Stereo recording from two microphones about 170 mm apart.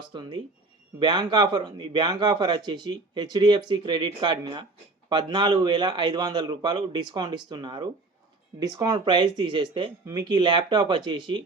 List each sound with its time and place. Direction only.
0.1 s speech: 25° right (ahead or behind)